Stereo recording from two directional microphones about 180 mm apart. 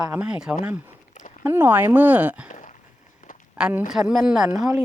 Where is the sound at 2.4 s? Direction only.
45° left (ahead or behind).